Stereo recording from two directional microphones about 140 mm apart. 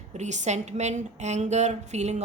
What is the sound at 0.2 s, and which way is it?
A woman's voice, 55° right (ahead or behind).